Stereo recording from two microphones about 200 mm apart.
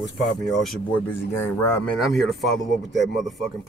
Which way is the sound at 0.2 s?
Centre (ahead or behind).